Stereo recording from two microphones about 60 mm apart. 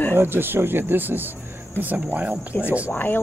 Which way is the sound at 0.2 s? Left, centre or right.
Right.